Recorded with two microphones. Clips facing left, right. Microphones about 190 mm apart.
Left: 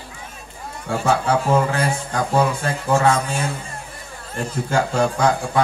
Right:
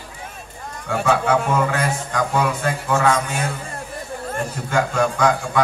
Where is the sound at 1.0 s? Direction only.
35° left (ahead or behind).